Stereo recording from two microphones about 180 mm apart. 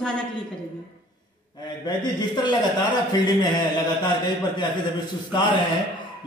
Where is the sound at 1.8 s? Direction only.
25° left (ahead or behind).